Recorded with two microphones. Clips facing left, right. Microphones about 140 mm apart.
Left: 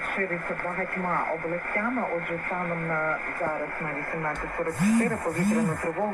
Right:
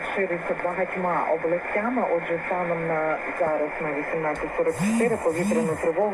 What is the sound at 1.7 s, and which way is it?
Speech, 50° right (ahead or behind).